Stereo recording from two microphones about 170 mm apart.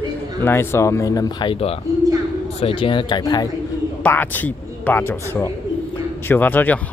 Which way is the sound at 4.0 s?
10° left (ahead or behind).